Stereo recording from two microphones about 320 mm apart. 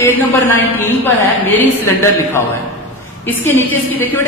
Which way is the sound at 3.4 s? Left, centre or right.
Centre.